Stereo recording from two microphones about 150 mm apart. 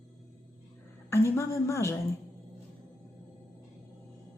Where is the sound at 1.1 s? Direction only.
20° left (ahead or behind).